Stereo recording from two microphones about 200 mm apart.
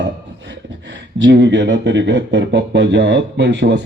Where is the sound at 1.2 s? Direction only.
60° right (ahead or behind).